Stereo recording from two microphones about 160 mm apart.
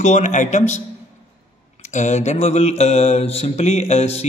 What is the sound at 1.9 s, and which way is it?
Speech, 50° left (ahead or behind).